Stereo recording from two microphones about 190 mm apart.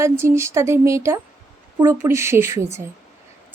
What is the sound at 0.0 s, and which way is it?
A woman's voice, 15° right (ahead or behind).